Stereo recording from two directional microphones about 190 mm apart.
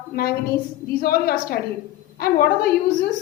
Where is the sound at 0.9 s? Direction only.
50° left (ahead or behind).